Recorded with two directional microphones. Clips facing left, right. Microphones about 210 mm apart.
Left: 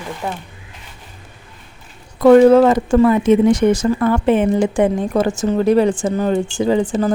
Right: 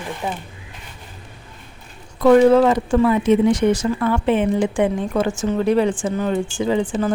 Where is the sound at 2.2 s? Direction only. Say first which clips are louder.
Left 4 dB; 45° left (ahead or behind).